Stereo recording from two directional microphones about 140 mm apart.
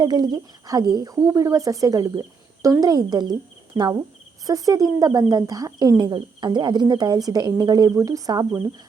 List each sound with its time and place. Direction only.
0.0 s speech: 30° right (ahead or behind)
4.4 s speech: 25° right (ahead or behind)